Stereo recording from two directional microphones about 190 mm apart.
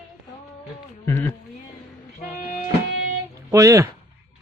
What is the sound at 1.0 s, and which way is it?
Speech, 15° left (ahead or behind).